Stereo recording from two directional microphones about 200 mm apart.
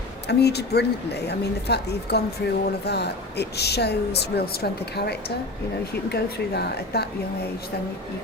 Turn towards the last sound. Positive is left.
turn(degrees=55)  # may be behind; listen again after turning